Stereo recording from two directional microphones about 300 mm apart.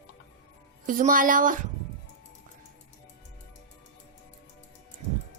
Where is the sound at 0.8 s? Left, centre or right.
Right.